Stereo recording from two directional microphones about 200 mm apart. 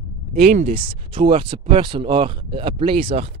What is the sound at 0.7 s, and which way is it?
Speech, 25° right (ahead or behind).